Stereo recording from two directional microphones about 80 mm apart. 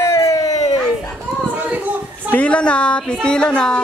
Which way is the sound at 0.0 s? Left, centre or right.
Left.